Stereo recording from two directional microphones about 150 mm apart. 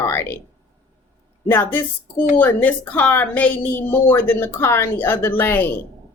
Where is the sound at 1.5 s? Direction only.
15° left (ahead or behind).